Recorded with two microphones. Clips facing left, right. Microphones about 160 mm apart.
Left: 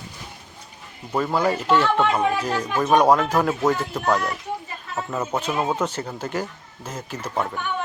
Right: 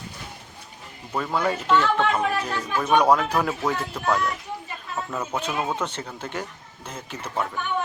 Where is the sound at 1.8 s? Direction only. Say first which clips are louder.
Left 2 dB; 30° left (ahead or behind).